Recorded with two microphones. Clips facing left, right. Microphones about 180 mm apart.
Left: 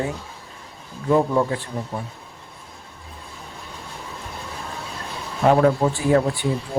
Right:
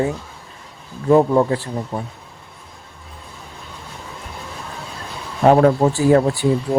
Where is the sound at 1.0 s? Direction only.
40° right (ahead or behind).